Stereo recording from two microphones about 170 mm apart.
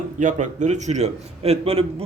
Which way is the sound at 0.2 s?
50° right (ahead or behind).